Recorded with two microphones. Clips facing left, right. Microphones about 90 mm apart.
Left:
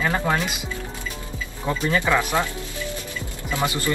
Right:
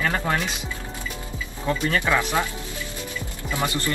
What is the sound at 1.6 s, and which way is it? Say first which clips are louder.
Speech: left 1 dB; 20° left (ahead or behind).